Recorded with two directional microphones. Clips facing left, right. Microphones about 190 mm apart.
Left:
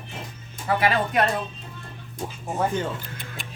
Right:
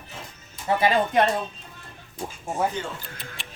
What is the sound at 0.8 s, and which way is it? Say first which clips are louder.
Speech: right 2 dB; 25° right (ahead or behind).